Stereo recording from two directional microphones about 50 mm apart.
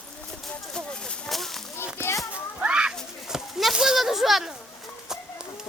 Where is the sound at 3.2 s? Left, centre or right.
Centre.